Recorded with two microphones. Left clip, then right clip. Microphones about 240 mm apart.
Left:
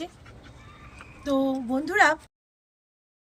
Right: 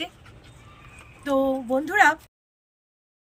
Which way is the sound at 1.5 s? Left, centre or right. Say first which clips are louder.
Right 4 dB; centre.